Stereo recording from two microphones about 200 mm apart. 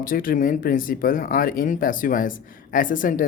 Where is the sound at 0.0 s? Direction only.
45° left (ahead or behind).